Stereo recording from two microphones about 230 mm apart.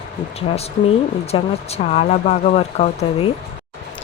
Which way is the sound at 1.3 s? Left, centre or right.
Left.